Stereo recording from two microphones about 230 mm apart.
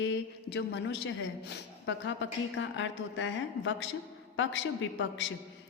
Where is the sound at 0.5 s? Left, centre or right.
Left.